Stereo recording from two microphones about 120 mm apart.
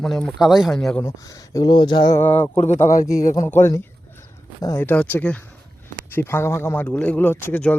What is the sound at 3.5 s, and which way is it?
Speech, 20° left (ahead or behind).